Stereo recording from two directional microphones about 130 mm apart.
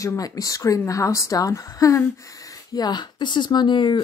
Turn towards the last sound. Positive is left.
turn(degrees=35)  # may be behind; listen again after turning